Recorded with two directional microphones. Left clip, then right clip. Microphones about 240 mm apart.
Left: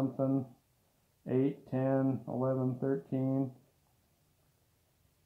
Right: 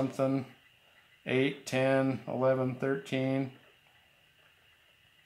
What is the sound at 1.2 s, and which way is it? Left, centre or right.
Speech, right.